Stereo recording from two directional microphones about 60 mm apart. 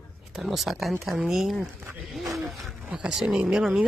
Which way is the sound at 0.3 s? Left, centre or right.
Centre.